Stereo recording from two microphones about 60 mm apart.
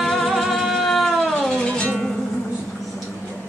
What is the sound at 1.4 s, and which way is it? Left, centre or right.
Music, centre.